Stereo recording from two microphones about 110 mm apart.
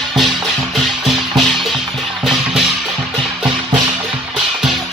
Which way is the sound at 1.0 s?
Centre (ahead or behind).